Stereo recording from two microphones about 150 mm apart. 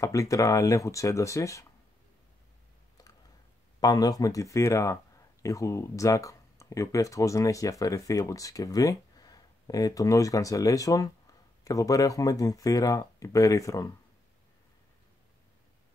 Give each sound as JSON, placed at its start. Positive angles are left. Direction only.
{"t": 0.0, "sound": "speech", "side_deg": 20}
{"t": 3.8, "sound": "speech", "side_deg": 25}